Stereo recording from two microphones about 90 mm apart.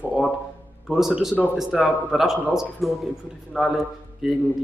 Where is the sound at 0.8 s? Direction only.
5° right (ahead or behind).